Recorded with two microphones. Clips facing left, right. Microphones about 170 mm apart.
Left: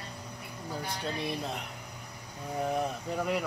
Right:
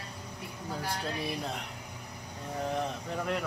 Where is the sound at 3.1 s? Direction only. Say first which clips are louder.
Left 2 dB; 5° left (ahead or behind).